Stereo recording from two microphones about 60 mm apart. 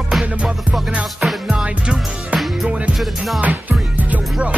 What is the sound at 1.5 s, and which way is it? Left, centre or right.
Music, centre.